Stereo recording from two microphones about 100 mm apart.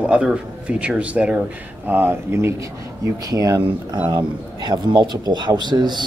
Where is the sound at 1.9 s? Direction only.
20° right (ahead or behind).